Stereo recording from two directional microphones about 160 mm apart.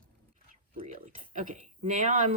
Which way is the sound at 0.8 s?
50° right (ahead or behind).